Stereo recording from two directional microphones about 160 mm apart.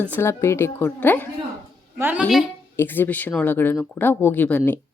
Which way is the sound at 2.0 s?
10° right (ahead or behind).